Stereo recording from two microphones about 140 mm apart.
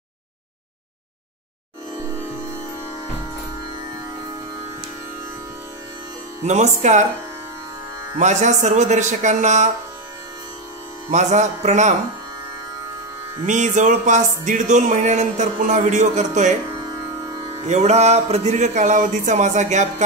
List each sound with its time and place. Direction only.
6.4 s speech: 55° right (ahead or behind)
8.2 s speech: 55° right (ahead or behind)
11.1 s speech: 55° right (ahead or behind)
13.5 s speech: 60° right (ahead or behind)